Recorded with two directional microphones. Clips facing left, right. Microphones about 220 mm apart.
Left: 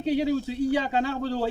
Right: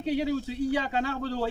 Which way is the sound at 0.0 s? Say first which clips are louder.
Left 3 dB; 25° left (ahead or behind).